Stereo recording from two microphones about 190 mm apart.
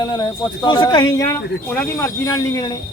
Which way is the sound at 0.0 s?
25° left (ahead or behind).